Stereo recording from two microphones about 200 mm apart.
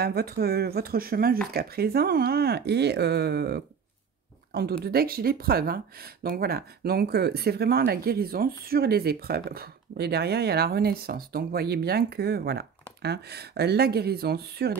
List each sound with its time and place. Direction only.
0.0 s speech: 50° right (ahead or behind)